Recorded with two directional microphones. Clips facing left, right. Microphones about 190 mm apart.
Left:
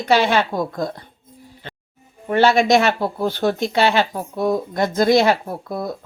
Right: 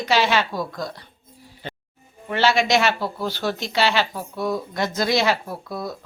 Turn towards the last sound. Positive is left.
turn(degrees=50)  # may be behind; listen again after turning